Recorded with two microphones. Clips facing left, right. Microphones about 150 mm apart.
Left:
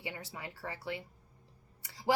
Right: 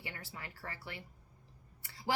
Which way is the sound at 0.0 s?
20° left (ahead or behind).